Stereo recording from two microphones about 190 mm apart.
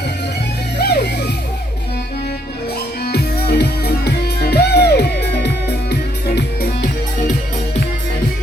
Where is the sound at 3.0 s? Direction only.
60° left (ahead or behind).